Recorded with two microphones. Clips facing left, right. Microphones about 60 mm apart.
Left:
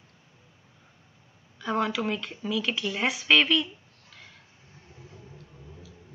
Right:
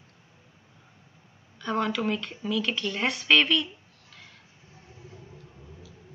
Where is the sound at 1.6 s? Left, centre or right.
Centre.